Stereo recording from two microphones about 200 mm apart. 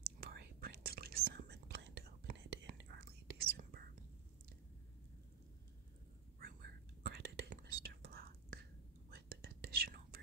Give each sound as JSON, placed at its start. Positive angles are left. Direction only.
{"t": 0.2, "sound": "whispering", "side_deg": -50}
{"t": 6.4, "sound": "whispering", "side_deg": -50}